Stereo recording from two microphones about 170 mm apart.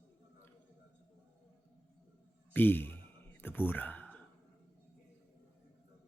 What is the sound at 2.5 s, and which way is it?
Sigh, 10° left (ahead or behind).